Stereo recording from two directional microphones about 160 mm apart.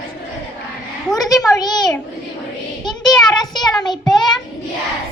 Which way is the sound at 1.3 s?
20° left (ahead or behind).